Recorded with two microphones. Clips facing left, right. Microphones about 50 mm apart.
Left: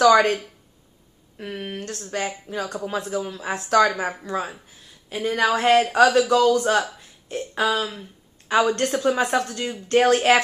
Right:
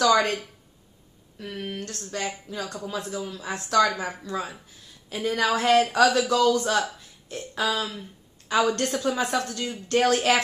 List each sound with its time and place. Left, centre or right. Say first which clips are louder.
0.0 s speech: left 5 dB; left
1.4 s a man's voice: left 2 dB; left
3.3 s speech: left 3 dB; centre
5.1 s a woman's voice: left 3 dB; centre